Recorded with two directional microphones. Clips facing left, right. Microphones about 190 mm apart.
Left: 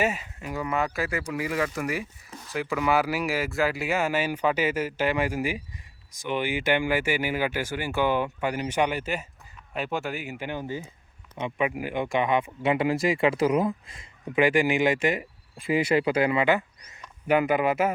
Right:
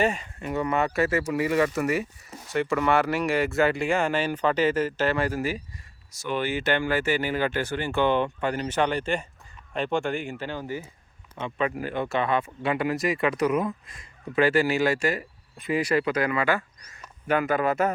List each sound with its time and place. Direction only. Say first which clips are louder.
0.0 s speech: right 2 dB; 5° left (ahead or behind); by 14.1 s 25° left (ahead or behind)
14.3 s speech: even; 15° left (ahead or behind)